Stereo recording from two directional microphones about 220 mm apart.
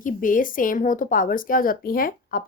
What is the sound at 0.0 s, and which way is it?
A woman's voice, 35° left (ahead or behind).